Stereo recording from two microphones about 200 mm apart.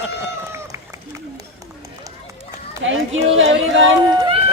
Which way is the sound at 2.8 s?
70° right (ahead or behind).